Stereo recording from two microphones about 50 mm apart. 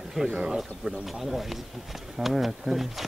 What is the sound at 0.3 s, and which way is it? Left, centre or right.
Speech, right.